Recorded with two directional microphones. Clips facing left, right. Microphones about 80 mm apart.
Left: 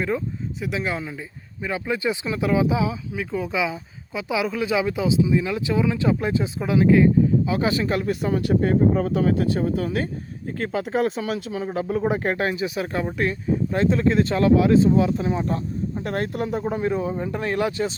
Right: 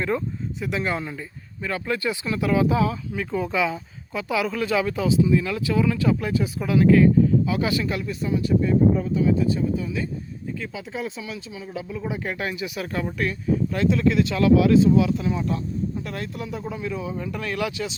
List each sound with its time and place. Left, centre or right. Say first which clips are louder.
0.6 s speech: right 1 dB; centre
1.6 s speech: left 1 dB; centre; by 11.5 s left
11.5 s speech: left 7 dB; left
12.4 s speech: left 5 dB; left
16.0 s speech: left 6 dB; left